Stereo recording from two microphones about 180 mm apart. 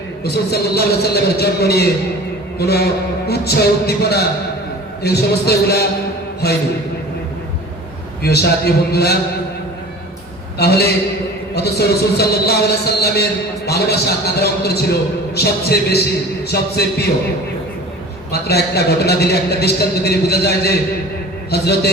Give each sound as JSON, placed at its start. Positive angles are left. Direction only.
{"t": 0.5, "sound": "a man's voice", "side_deg": 60}
{"t": 8.2, "sound": "a man's voice", "side_deg": 60}
{"t": 10.6, "sound": "a man's voice", "side_deg": 65}
{"t": 18.3, "sound": "a man's voice", "side_deg": 60}